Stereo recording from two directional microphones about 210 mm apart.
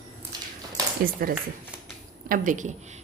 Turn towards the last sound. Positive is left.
turn(degrees=-35)  # may be behind; listen again after turning